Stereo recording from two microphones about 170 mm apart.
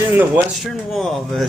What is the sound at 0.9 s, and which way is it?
Speech, centre (ahead or behind).